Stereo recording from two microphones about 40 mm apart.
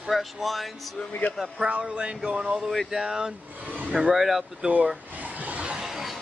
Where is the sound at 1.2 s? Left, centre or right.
Left.